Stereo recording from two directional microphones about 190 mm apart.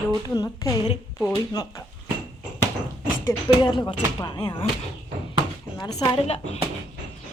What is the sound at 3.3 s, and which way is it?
Speech, 25° left (ahead or behind).